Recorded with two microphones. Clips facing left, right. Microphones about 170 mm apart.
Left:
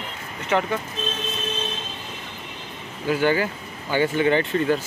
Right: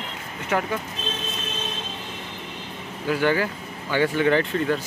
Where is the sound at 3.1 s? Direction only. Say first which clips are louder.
Left 1 dB; 30° left (ahead or behind).